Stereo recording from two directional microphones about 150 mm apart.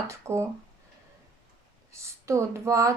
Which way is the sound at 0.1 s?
20° right (ahead or behind).